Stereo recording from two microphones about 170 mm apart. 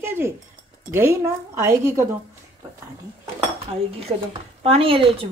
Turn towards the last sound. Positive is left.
turn(degrees=-30)  # may be behind; listen again after turning